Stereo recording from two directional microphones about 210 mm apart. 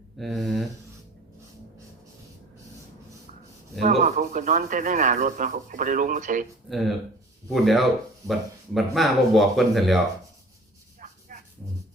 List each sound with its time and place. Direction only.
0.2 s speech: centre (ahead or behind)
3.8 s speech: 35° right (ahead or behind)
6.7 s speech: centre (ahead or behind)
11.0 s a sound: 35° right (ahead or behind)